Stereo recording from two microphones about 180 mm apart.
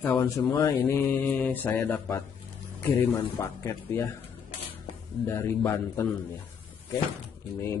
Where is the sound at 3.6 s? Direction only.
15° left (ahead or behind).